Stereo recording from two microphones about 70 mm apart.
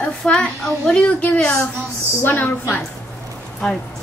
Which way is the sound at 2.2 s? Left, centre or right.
Left.